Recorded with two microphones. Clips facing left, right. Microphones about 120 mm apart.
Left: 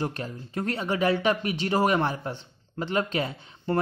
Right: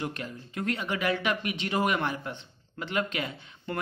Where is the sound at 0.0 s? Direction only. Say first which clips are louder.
Left 4 dB; 35° left (ahead or behind).